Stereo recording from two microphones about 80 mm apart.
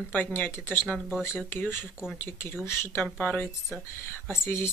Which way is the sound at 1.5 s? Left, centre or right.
Left.